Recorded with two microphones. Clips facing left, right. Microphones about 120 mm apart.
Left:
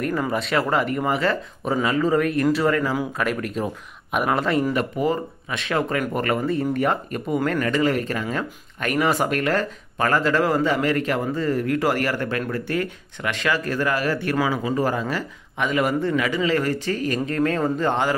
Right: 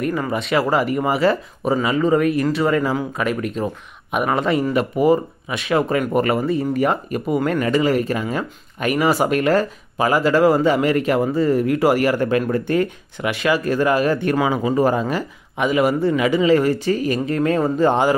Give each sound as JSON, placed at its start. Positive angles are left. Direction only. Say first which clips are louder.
{"t": 0.0, "sound": "speech", "louder": "right 2 dB", "side_deg": -5}
{"t": 2.7, "sound": "speech", "louder": "right 3 dB", "side_deg": -15}
{"t": 3.2, "sound": "speech", "louder": "right 3 dB", "side_deg": -5}